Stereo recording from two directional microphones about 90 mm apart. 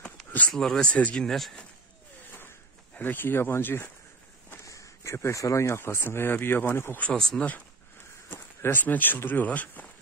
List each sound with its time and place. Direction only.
0.0 s a sound: 15° left (ahead or behind)
0.5 s speech: 5° left (ahead or behind)
3.0 s speech: 20° left (ahead or behind)
4.6 s speech: 35° left (ahead or behind)
7.0 s speech: 10° left (ahead or behind)
8.3 s speech: 25° left (ahead or behind)